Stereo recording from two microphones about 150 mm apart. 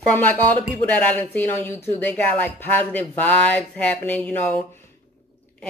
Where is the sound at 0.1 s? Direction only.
10° left (ahead or behind).